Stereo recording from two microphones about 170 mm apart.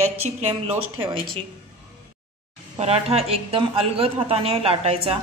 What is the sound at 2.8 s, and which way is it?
A woman's voice, 40° right (ahead or behind).